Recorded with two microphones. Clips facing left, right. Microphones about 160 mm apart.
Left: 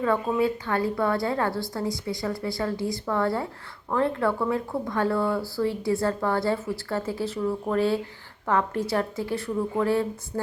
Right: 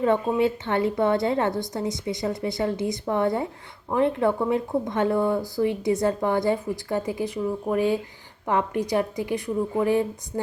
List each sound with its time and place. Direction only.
0.0 s a woman's voice: 25° right (ahead or behind)